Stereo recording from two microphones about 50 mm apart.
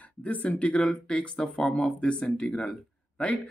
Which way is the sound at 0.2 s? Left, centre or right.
Left.